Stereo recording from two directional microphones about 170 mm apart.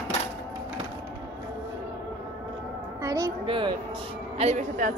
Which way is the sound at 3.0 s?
20° right (ahead or behind).